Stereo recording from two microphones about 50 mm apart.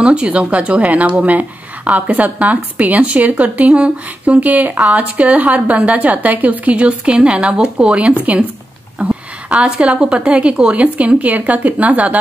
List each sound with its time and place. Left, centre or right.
0.0 s speech: centre
4.5 s speech: right